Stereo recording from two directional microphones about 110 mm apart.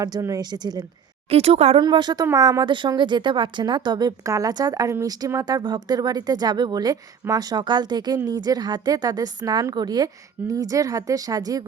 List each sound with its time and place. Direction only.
0.0 s speech: 30° right (ahead or behind)
1.3 s speech: 70° right (ahead or behind)
1.8 s speech: 45° right (ahead or behind)